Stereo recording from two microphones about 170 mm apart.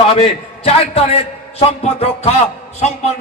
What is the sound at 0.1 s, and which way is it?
A man's voice, 35° left (ahead or behind).